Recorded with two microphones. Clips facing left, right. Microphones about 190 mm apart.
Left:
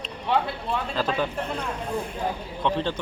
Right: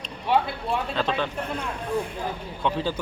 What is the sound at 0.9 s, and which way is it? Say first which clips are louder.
Speech: left 2 dB; 5° left (ahead or behind).